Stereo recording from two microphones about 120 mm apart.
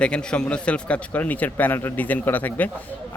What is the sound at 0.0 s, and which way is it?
Speech, 10° left (ahead or behind).